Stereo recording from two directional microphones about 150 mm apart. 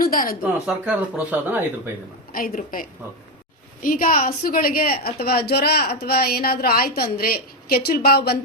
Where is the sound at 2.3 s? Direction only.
70° left (ahead or behind).